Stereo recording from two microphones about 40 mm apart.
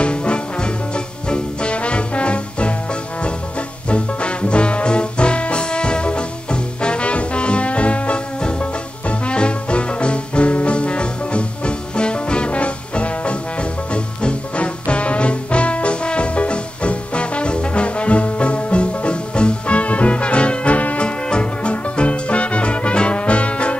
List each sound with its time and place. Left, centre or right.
0.0 s music: left
21.0 s music: left